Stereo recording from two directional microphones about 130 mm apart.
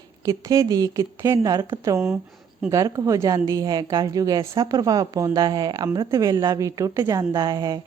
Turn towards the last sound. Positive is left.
turn(degrees=-30)  # may be behind; listen again after turning